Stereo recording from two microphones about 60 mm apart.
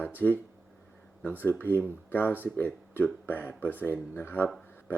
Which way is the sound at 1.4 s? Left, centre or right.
Left.